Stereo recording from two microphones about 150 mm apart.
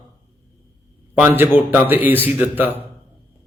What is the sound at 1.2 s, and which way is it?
A man's voice, 15° right (ahead or behind).